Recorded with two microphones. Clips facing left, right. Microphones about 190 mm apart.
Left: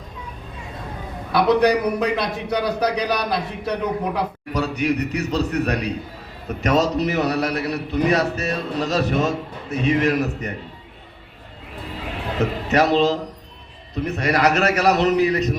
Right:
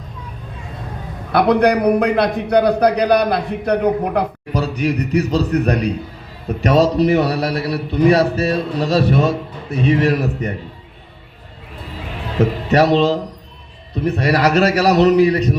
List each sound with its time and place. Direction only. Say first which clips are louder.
1.3 s a man's voice: right 3 dB; 55° right (ahead or behind)
4.5 s a man's voice: right 2 dB; 35° right (ahead or behind)
12.7 s a man's voice: right 3 dB; 35° right (ahead or behind)